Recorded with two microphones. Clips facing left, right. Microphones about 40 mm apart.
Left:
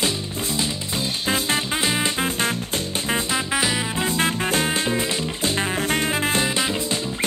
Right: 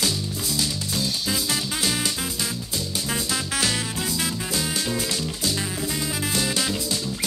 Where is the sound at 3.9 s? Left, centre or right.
Left.